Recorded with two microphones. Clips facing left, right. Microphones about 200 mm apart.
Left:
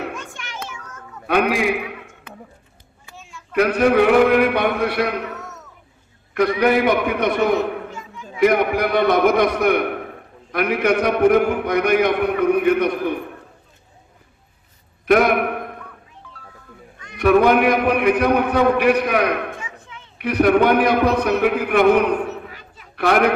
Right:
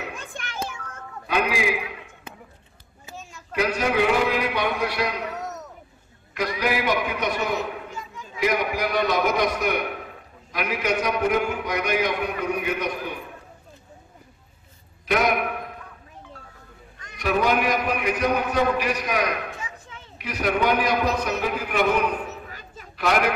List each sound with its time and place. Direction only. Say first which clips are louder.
1.2 s a man's voice: left 6 dB; 60° left (ahead or behind)
3.2 s sheep: even; 40° right (ahead or behind)
3.5 s a man's voice: left 7 dB; 60° left (ahead or behind)
15.0 s a sound: left 7 dB; 55° left (ahead or behind)
17.2 s a man's voice: left 8 dB; 60° left (ahead or behind)